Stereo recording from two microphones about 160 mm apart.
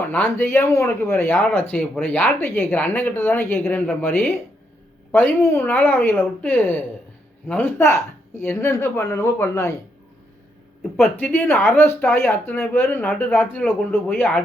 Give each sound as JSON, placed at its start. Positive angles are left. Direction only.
{"t": 0.1, "sound": "speech", "side_deg": 10}
{"t": 11.2, "sound": "speech", "side_deg": 10}